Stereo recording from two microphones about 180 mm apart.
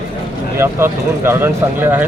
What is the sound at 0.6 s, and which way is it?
Speech, 15° right (ahead or behind).